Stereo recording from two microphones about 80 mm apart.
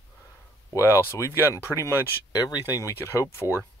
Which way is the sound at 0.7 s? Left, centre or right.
Left.